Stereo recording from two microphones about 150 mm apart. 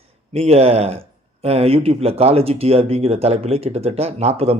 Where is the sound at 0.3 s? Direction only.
40° right (ahead or behind).